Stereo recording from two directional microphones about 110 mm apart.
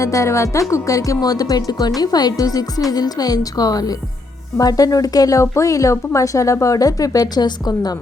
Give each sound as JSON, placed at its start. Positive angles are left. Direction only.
{"t": 0.0, "sound": "speech", "side_deg": 30}